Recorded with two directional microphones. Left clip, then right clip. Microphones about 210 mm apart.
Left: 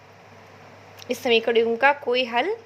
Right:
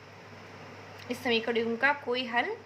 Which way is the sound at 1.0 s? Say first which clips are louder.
Left 9 dB; 35° left (ahead or behind).